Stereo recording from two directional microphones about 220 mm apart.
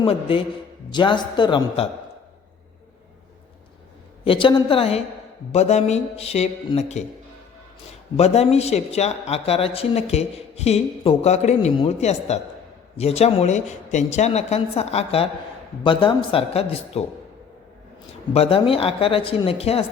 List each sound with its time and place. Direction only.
0.0 s speech: 25° left (ahead or behind)
4.2 s speech: 25° left (ahead or behind)
8.1 s speech: 30° left (ahead or behind)
18.3 s speech: 25° left (ahead or behind)